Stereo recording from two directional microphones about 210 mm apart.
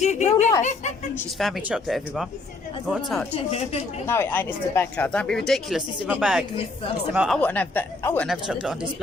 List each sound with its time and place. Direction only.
0.0 s a woman's voice: 30° left (ahead or behind)
1.4 s speech: centre (ahead or behind)
4.0 s speech: 10° left (ahead or behind); by 7.3 s 5° right (ahead or behind)
7.3 s speech: 10° left (ahead or behind)